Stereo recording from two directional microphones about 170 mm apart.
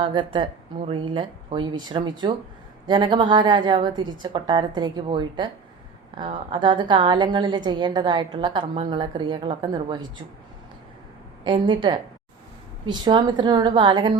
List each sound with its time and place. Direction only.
0.0 s a woman's voice: 30° right (ahead or behind)
11.4 s a woman's voice: 30° right (ahead or behind)